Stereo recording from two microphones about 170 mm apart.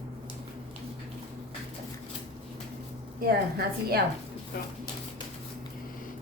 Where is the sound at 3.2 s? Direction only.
65° right (ahead or behind).